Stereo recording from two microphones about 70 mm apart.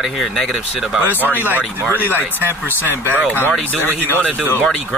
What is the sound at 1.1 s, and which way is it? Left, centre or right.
Speech, left.